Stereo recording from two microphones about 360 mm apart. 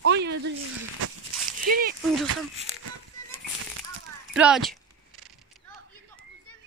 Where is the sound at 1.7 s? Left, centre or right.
Right.